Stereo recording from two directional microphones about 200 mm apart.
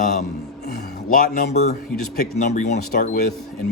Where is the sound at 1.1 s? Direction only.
40° left (ahead or behind).